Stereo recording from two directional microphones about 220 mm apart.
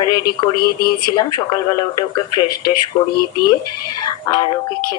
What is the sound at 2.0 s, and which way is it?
Speech, 20° left (ahead or behind).